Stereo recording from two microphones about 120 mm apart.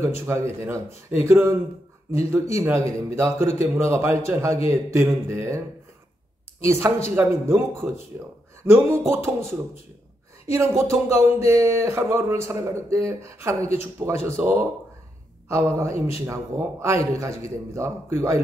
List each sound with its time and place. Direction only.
0.3 s speech: 25° right (ahead or behind)
6.6 s speech: 20° right (ahead or behind)
10.5 s a man's voice: 20° right (ahead or behind)